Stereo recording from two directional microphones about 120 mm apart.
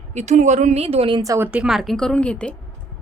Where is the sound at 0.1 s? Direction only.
70° right (ahead or behind); by 1.1 s 55° right (ahead or behind).